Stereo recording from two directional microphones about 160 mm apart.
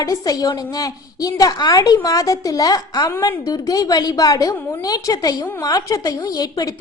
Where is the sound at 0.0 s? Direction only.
20° left (ahead or behind).